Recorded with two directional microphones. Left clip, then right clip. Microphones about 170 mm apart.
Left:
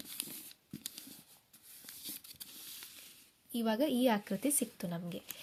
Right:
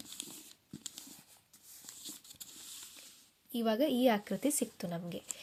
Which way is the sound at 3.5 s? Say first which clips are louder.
Right 2 dB; centre (ahead or behind).